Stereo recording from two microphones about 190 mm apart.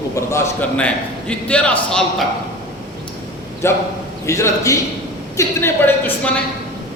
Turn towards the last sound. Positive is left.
turn(degrees=10)  # may be behind; listen again after turning